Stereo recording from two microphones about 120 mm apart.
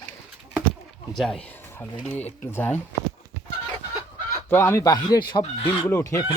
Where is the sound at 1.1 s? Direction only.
5° left (ahead or behind).